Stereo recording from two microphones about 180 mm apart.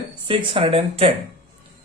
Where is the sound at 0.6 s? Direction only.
30° right (ahead or behind).